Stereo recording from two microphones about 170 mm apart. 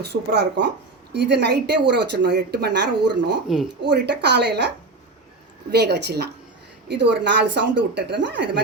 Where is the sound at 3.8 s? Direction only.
90° right.